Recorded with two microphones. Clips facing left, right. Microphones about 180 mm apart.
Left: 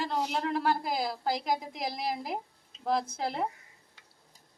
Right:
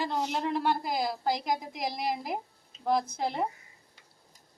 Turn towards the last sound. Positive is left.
turn(degrees=5)  # may be behind; listen again after turning